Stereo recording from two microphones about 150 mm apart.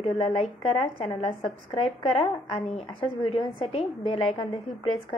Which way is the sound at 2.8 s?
40° left (ahead or behind).